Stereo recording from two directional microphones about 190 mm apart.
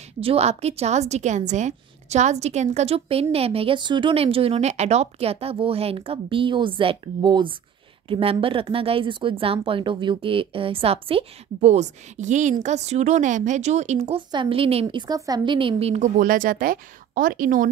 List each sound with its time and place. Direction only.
0.2 s a woman's voice: 30° right (ahead or behind)